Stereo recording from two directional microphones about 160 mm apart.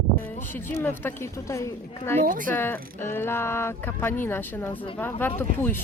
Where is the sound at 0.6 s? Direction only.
15° left (ahead or behind).